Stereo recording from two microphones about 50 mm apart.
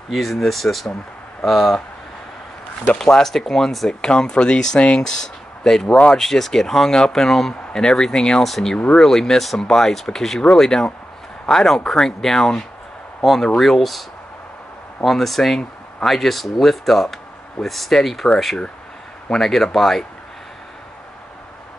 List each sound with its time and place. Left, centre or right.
0.1 s speech: centre
3.0 s speech: centre
4.0 s speech: centre
15.0 s speech: centre
19.4 s speech: centre